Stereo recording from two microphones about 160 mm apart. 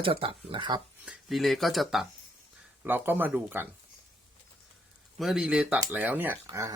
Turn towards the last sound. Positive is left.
turn(degrees=-20)  # may be behind; listen again after turning